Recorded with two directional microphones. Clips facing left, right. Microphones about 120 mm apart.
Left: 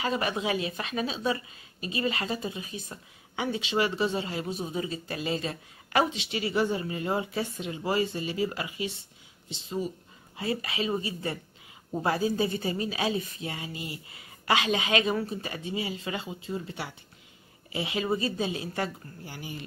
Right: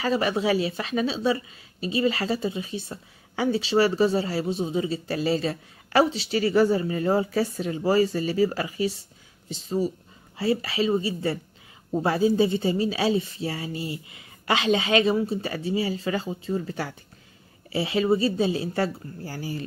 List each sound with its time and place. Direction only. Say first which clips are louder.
0.0 s a woman's voice: right 5 dB; 30° right (ahead or behind)